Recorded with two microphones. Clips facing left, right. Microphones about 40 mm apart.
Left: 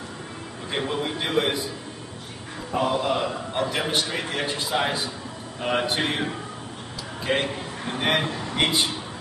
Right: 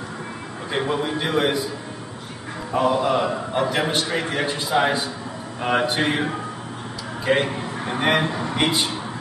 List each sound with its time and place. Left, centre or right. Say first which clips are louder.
0.7 s a man's voice: right 4 dB; centre
2.8 s a man's voice: right 4 dB; centre
7.5 s a man's voice: right 4 dB; centre
8.3 s a sound: right 4 dB; centre
8.5 s a man's voice: even; centre